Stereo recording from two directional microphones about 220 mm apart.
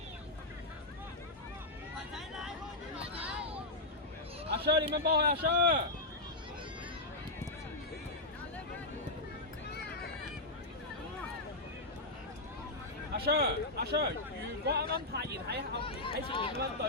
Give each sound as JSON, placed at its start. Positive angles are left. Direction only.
{"t": 2.1, "sound": "vehicle", "side_deg": 0}
{"t": 4.5, "sound": "speech", "side_deg": -45}
{"t": 13.1, "sound": "speech", "side_deg": -45}
{"t": 15.8, "sound": "speech", "side_deg": 25}